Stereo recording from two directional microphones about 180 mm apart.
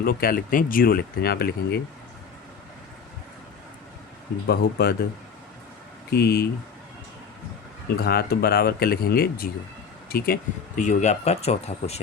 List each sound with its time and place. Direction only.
0.0 s speech: 55° left (ahead or behind)
4.4 s speech: 60° left (ahead or behind)
6.1 s speech: 60° left (ahead or behind)
8.0 s speech: 60° left (ahead or behind)
10.8 s speech: 40° left (ahead or behind)